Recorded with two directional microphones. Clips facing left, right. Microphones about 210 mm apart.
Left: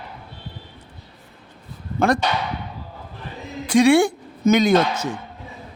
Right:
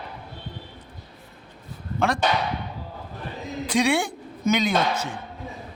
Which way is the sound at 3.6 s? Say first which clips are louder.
Left 8 dB; 50° left (ahead or behind).